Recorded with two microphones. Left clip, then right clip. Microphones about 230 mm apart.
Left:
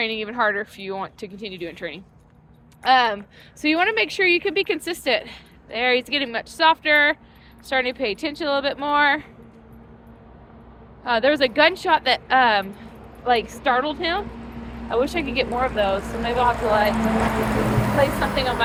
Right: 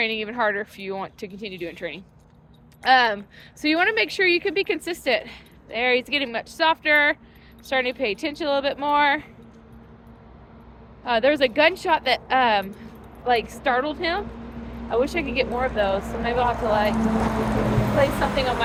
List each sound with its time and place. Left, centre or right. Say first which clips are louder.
0.0 s a woman's voice: left 1 dB; centre
11.0 s a woman's voice: left 1 dB; centre
14.2 s vehicle: left 1 dB; left
14.8 s speech: left 1 dB; centre
16.0 s speech: left 1 dB; left
18.0 s a woman's voice: even; centre